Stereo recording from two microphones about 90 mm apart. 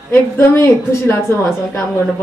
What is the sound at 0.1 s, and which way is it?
A woman's voice, 25° left (ahead or behind).